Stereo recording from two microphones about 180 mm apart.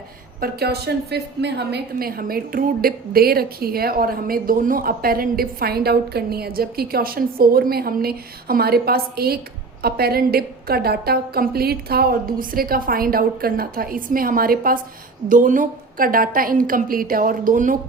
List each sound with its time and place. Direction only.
0.3 s a woman's voice: 60° right (ahead or behind)